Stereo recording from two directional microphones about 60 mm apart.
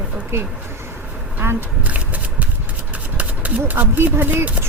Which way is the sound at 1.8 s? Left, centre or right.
Right.